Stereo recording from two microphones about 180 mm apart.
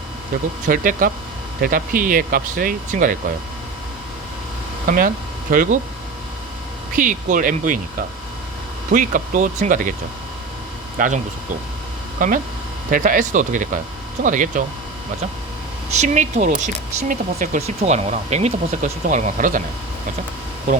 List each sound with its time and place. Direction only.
0.7 s speech: 50° right (ahead or behind)
4.9 s speech: 50° right (ahead or behind)
6.9 s speech: 45° right (ahead or behind)
8.9 s speech: 45° right (ahead or behind)
10.9 s speech: 45° right (ahead or behind)
12.2 s speech: 50° right (ahead or behind)
16.0 s speech: 45° right (ahead or behind)